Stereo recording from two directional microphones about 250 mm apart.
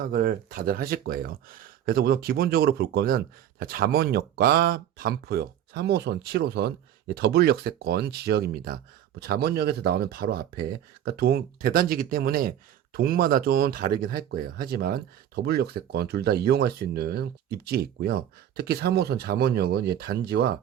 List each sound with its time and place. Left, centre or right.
0.0 s speech: right